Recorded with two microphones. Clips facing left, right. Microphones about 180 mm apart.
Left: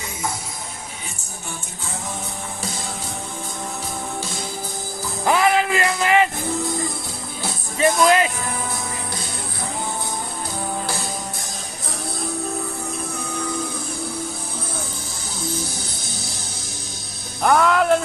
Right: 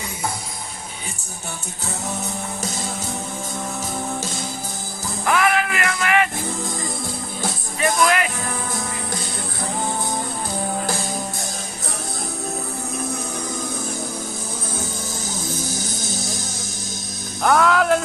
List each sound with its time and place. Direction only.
5.2 s music: 30° left (ahead or behind)
7.8 s speech: 25° left (ahead or behind)
17.4 s music: centre (ahead or behind)